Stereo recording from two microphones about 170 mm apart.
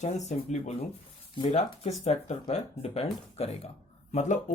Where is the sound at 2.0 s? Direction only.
40° left (ahead or behind).